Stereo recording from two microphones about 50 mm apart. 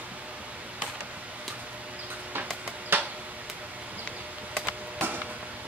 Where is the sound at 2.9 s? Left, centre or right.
Right.